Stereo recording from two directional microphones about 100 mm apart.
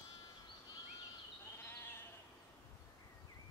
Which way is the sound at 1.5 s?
25° left (ahead or behind).